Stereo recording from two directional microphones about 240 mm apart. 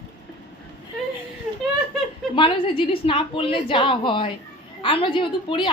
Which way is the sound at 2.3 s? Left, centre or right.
Left.